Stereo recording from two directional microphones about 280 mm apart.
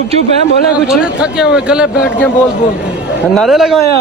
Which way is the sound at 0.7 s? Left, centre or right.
Centre.